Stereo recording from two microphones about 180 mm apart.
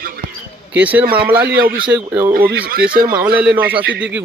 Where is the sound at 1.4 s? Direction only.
60° right (ahead or behind).